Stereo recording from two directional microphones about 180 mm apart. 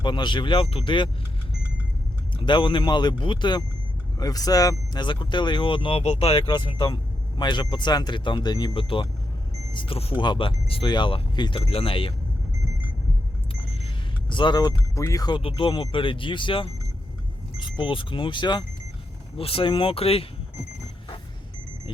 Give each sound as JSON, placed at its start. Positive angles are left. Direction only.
{"t": 0.0, "sound": "speech", "side_deg": 25}
{"t": 2.4, "sound": "speech", "side_deg": 25}
{"t": 13.5, "sound": "speech", "side_deg": 30}